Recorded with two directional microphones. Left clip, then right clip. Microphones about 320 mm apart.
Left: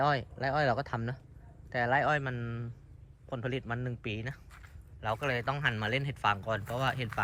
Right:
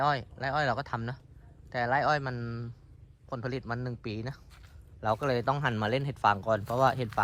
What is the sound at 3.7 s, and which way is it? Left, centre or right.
Speech, centre.